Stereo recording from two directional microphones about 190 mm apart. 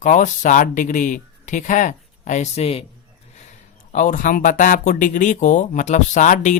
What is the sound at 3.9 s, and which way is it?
Speech, 40° left (ahead or behind).